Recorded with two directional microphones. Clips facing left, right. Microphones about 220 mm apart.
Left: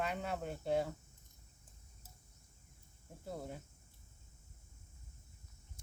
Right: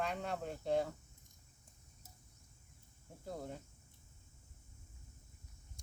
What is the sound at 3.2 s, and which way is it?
Speech, 5° left (ahead or behind).